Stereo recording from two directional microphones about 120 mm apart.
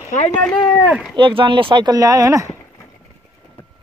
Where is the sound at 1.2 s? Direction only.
45° right (ahead or behind); by 2.5 s 25° right (ahead or behind).